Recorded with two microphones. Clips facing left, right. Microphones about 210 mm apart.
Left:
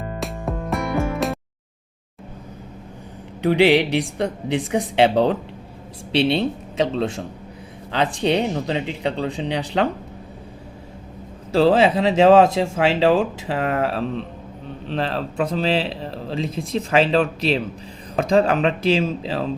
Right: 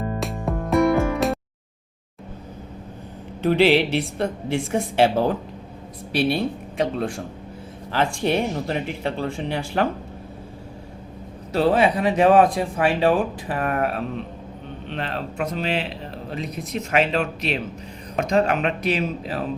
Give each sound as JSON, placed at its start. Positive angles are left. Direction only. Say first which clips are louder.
{"t": 0.2, "sound": "music", "louder": "right 1 dB", "side_deg": 0}
{"t": 3.4, "sound": "a woman's voice", "louder": "left 1 dB", "side_deg": 15}
{"t": 11.6, "sound": "speech", "louder": "left 3 dB", "side_deg": 25}